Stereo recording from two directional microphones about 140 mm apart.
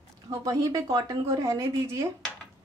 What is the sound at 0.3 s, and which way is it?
Speech, 25° right (ahead or behind).